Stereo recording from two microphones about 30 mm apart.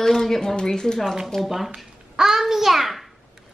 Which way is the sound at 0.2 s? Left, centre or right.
Centre.